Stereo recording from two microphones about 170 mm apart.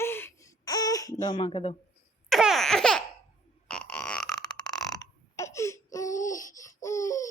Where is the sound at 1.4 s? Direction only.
40° left (ahead or behind).